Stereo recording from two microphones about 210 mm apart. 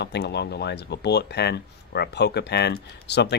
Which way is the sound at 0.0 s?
55° left (ahead or behind).